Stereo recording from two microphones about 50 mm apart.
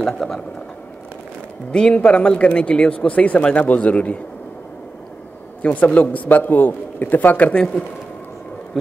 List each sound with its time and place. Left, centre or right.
0.0 s speech: centre
1.7 s speech: centre
5.6 s a man's voice: left